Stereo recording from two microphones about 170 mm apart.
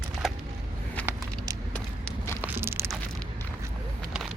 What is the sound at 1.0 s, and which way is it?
Vehicle, 10° left (ahead or behind).